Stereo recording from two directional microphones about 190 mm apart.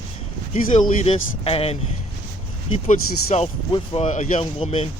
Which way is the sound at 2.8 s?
35° left (ahead or behind).